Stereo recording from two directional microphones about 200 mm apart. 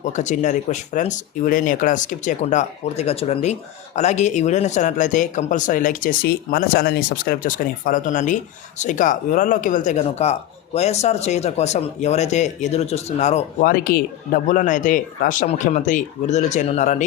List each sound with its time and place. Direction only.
0.0 s speech: 35° left (ahead or behind)